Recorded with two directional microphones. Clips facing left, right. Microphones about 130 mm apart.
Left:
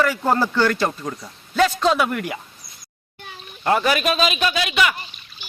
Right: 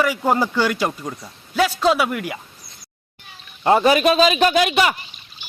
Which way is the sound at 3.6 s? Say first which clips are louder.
Right 4 dB; 25° right (ahead or behind).